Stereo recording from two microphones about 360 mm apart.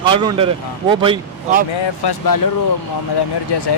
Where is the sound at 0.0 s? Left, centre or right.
Centre.